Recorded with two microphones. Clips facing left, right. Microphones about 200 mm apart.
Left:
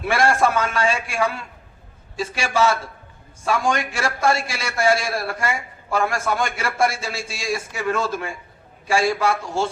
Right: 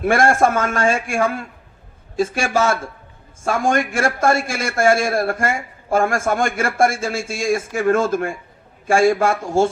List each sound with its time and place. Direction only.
0.0 s a man's voice: 50° right (ahead or behind)